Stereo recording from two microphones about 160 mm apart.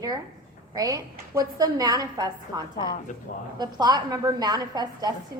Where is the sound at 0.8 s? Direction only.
20° right (ahead or behind).